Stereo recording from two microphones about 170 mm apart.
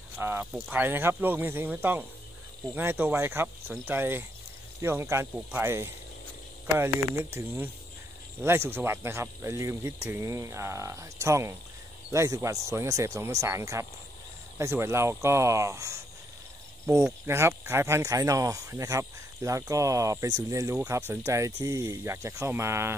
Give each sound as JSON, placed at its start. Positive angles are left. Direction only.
{"t": 0.2, "sound": "speech", "side_deg": -10}
{"t": 7.3, "sound": "speech", "side_deg": -10}